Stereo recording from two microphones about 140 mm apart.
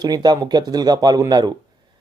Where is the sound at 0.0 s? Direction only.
30° right (ahead or behind).